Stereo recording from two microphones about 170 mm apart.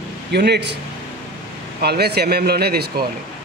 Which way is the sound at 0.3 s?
80° right.